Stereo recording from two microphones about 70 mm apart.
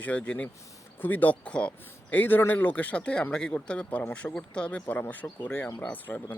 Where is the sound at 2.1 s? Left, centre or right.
Left.